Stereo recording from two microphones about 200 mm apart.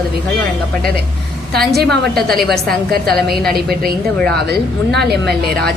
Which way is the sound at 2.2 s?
Centre (ahead or behind).